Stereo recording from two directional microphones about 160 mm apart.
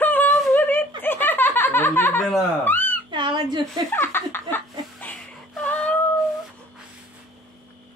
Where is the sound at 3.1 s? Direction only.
30° right (ahead or behind).